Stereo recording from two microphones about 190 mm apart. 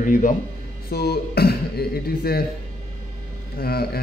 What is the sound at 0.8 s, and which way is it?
A man's voice, 55° left (ahead or behind).